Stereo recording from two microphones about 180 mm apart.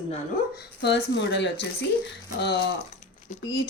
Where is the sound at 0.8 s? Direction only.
70° left (ahead or behind).